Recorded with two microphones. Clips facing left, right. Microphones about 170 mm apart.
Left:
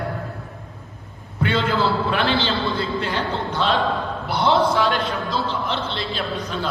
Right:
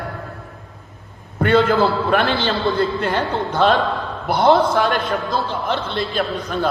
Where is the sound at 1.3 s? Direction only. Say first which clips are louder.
Right 6 dB; 50° right (ahead or behind).